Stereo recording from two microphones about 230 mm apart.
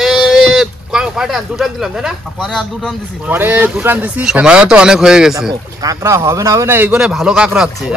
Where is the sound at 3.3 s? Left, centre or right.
Centre.